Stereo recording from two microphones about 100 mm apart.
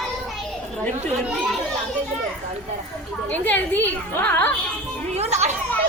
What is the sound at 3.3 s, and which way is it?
A woman's voice, 15° left (ahead or behind).